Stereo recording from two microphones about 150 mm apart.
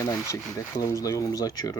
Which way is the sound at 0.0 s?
20° left (ahead or behind).